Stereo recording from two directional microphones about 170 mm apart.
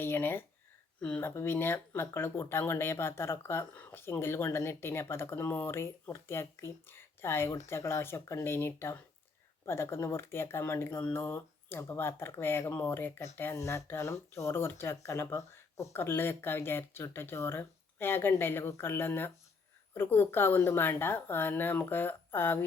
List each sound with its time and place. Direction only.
0.0 s speech: 15° left (ahead or behind)